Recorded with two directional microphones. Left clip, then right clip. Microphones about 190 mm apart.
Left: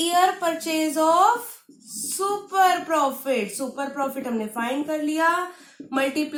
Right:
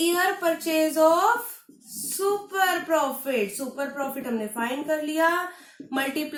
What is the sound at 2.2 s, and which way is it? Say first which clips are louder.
A woman's voice: left 3 dB; 30° left (ahead or behind).